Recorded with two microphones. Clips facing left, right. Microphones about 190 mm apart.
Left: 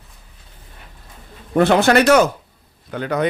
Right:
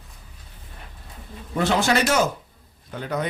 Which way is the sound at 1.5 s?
60° left (ahead or behind).